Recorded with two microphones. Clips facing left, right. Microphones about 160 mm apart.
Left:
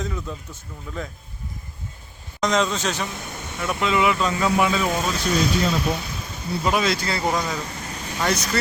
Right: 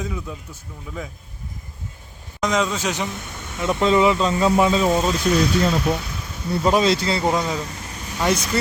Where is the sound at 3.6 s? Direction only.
30° right (ahead or behind).